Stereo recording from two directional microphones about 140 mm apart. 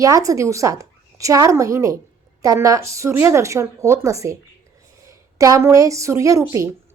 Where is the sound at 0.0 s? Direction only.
25° right (ahead or behind).